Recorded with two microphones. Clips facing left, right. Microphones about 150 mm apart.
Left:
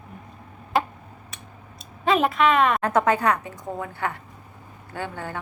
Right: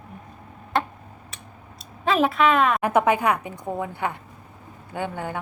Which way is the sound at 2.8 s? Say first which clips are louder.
Right 1 dB; 15° right (ahead or behind).